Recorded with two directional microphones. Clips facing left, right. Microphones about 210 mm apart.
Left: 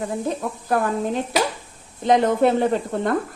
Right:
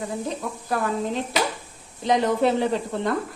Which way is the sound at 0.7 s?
55° left (ahead or behind).